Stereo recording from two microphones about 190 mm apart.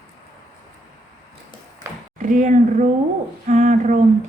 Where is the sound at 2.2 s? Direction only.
40° right (ahead or behind).